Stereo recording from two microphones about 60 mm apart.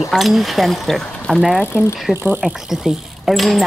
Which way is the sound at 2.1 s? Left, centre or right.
Centre.